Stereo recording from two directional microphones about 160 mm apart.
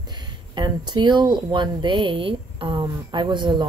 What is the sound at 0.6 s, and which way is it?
Speech, 30° right (ahead or behind).